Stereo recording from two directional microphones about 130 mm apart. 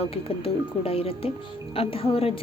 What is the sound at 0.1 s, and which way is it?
A woman's voice, 45° left (ahead or behind).